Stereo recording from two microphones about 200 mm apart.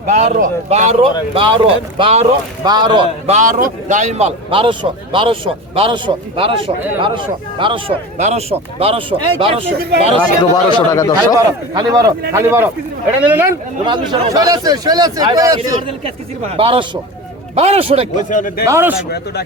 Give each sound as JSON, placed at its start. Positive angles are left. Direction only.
{"t": 0.1, "sound": "a man's voice", "side_deg": -35}
{"t": 3.3, "sound": "a man's voice", "side_deg": -40}
{"t": 9.7, "sound": "speech", "side_deg": -50}
{"t": 10.5, "sound": "a man's voice", "side_deg": 20}
{"t": 11.7, "sound": "a man's voice", "side_deg": -20}
{"t": 13.8, "sound": "a man's voice", "side_deg": -25}
{"t": 15.9, "sound": "a man's voice", "side_deg": -30}
{"t": 18.3, "sound": "speech", "side_deg": 40}
{"t": 18.6, "sound": "speech", "side_deg": -15}
{"t": 19.1, "sound": "speech", "side_deg": 55}